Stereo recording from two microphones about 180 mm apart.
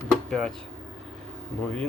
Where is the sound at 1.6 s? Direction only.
5° left (ahead or behind).